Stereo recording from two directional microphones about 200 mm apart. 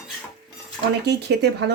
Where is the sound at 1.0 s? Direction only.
55° right (ahead or behind).